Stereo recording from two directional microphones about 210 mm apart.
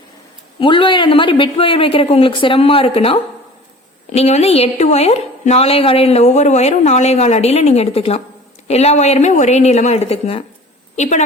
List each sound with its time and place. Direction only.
0.6 s a man's voice: 25° left (ahead or behind)